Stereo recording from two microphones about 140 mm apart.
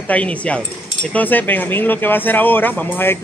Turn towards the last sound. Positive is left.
turn(degrees=15)  # may be behind; listen again after turning